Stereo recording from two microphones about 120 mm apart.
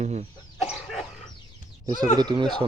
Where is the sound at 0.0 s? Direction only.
70° right (ahead or behind).